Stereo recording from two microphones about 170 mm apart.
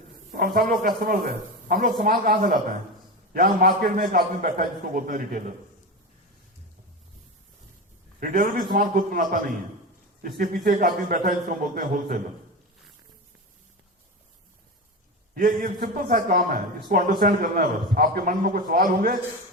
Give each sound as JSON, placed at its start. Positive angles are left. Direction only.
{"t": 0.3, "sound": "a man's voice", "side_deg": -60}
{"t": 8.2, "sound": "a man's voice", "side_deg": -55}
{"t": 15.4, "sound": "a man's voice", "side_deg": -60}